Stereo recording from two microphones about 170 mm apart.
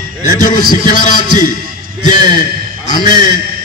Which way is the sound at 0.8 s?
50° left (ahead or behind).